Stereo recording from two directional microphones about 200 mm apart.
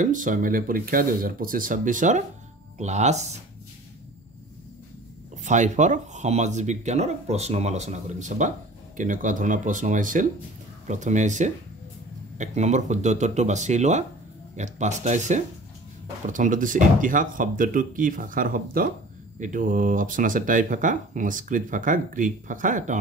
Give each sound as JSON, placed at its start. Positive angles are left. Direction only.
{"t": 0.0, "sound": "speech", "side_deg": -40}
{"t": 5.4, "sound": "speech", "side_deg": -35}